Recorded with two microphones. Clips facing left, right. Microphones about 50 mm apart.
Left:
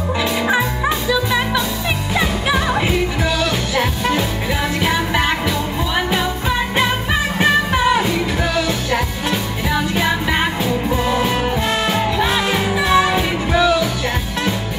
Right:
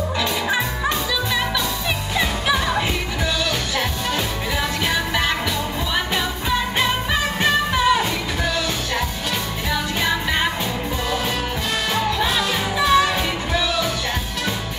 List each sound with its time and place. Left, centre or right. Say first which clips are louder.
0.2 s music: left 5 dB; centre
4.8 s music: left 5 dB; centre
6.8 s music: left 3 dB; centre
9.7 s music: left 4 dB; centre
11.1 s music: left 5 dB; left